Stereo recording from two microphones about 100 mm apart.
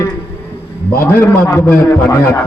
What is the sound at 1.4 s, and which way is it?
Speech, 30° left (ahead or behind).